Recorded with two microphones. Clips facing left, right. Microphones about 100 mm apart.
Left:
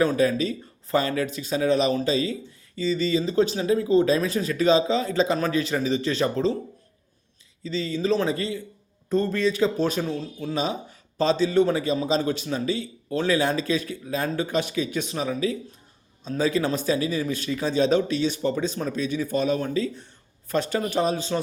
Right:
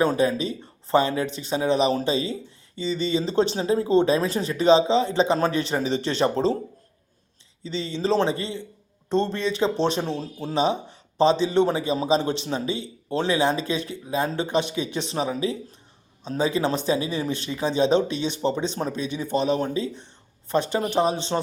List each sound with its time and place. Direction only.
0.0 s speech: 25° right (ahead or behind)
7.6 s speech: 25° right (ahead or behind)